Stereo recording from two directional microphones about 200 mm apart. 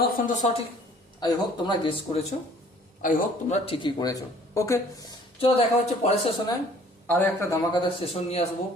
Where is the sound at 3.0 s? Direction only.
40° left (ahead or behind).